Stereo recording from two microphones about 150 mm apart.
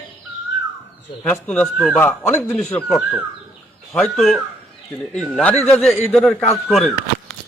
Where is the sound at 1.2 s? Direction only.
5° left (ahead or behind).